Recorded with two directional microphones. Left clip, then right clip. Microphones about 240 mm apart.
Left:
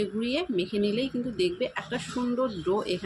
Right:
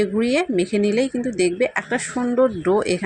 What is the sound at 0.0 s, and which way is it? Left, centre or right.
Speech, right.